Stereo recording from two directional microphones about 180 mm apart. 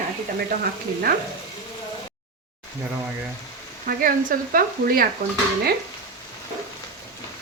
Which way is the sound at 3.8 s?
50° right (ahead or behind).